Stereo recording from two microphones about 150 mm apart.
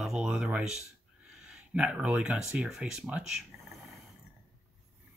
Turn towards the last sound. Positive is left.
turn(degrees=-5)  # may be behind; listen again after turning